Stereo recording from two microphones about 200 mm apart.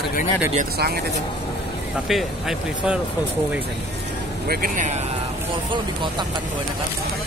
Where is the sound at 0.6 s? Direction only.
50° right (ahead or behind).